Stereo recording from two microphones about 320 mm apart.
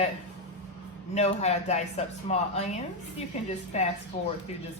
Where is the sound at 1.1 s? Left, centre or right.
Centre.